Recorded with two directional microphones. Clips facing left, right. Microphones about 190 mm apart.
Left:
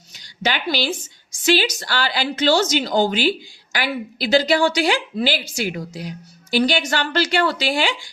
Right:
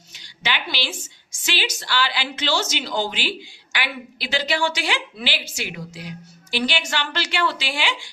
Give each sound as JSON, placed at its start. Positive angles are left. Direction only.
{"t": 0.1, "sound": "a woman's voice", "side_deg": 40}